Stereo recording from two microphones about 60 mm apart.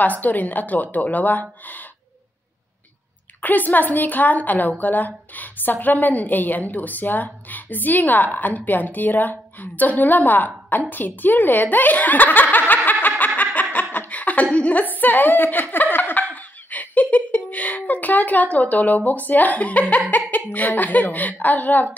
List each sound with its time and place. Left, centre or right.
0.0 s a woman's voice: left
3.3 s a woman's voice: left
13.4 s a sound: left
20.1 s a woman's voice: left